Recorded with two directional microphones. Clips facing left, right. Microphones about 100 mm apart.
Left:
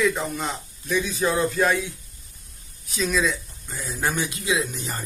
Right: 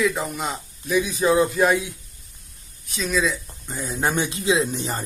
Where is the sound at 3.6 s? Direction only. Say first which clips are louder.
Right 3 dB; 20° right (ahead or behind).